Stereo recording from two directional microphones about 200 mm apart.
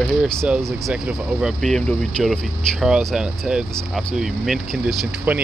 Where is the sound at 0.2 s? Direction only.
5° right (ahead or behind).